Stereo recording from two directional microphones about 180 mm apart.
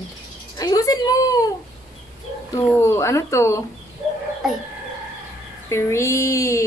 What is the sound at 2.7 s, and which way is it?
Speech, 15° left (ahead or behind).